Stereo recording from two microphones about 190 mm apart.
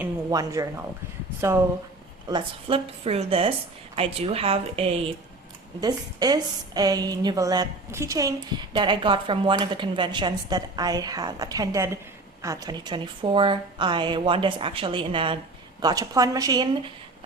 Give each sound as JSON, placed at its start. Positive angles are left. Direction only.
{"t": 0.0, "sound": "speech", "side_deg": -15}
{"t": 2.3, "sound": "a woman's voice", "side_deg": -30}